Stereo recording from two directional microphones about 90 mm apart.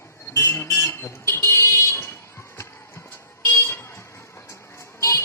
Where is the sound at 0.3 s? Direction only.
30° left (ahead or behind).